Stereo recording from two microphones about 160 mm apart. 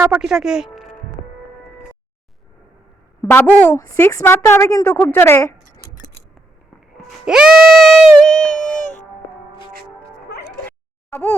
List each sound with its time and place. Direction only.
0.0 s speech: 5° right (ahead or behind)
3.2 s a woman's voice: 15° left (ahead or behind)
7.3 s a woman's voice: 5° right (ahead or behind)
8.8 s music: 50° left (ahead or behind)
10.7 s a sound: 15° left (ahead or behind)